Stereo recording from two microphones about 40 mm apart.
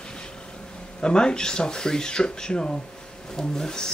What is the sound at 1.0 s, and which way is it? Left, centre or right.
Speech, left.